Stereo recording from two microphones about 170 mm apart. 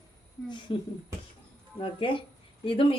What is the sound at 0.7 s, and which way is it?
Speech, 30° left (ahead or behind).